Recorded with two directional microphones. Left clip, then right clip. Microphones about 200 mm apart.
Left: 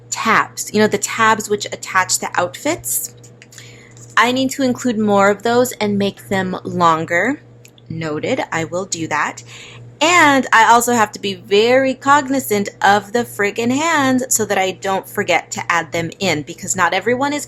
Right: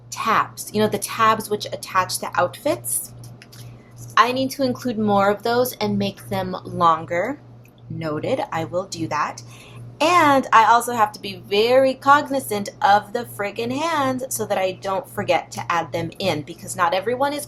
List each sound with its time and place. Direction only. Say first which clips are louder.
0.1 s speech: left 5 dB; 40° left (ahead or behind)
4.1 s speech: left 3 dB; 45° left (ahead or behind)